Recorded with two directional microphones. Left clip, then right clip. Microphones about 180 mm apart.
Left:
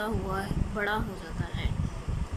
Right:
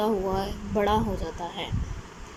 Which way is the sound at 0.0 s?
15° right (ahead or behind).